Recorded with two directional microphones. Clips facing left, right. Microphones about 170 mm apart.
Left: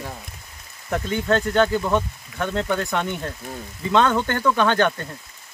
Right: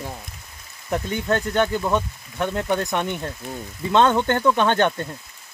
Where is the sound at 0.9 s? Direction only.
15° right (ahead or behind).